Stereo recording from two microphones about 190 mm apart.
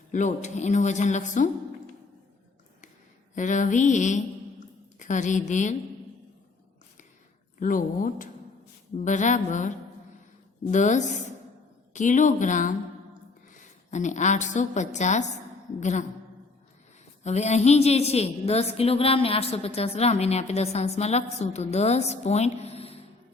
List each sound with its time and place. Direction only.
0.1 s a woman's voice: 40° left (ahead or behind)
3.3 s a woman's voice: 40° left (ahead or behind)
7.6 s a woman's voice: 45° left (ahead or behind)
17.2 s a woman's voice: 35° left (ahead or behind)